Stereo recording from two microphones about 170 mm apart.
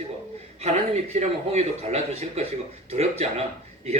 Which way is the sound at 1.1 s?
40° right (ahead or behind).